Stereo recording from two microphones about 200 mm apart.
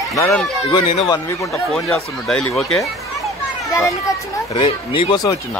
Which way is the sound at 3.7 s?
15° left (ahead or behind).